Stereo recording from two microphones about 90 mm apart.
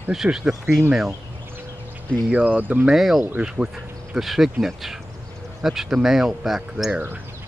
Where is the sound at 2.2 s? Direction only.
15° right (ahead or behind).